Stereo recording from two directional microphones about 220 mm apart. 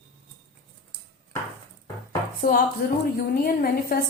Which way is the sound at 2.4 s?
40° left (ahead or behind).